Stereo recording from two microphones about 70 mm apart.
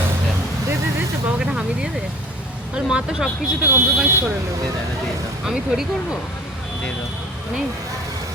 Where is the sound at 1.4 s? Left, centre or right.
Centre.